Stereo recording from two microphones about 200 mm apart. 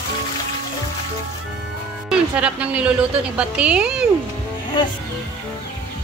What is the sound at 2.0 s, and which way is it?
Speech, 5° right (ahead or behind).